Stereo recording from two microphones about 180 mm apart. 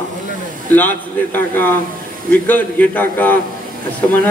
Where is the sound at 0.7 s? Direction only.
10° left (ahead or behind).